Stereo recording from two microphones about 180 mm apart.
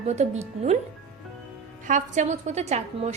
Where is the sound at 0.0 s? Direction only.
40° right (ahead or behind).